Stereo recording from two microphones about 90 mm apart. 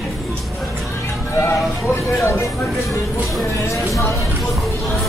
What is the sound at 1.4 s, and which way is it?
Music, 25° left (ahead or behind).